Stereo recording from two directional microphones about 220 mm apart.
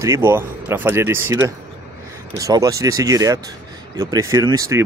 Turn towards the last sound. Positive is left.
turn(degrees=-15)  # may be behind; listen again after turning